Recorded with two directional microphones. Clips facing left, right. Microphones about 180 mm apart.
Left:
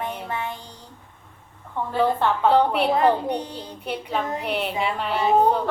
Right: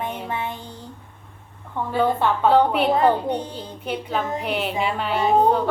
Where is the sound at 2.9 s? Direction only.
25° right (ahead or behind).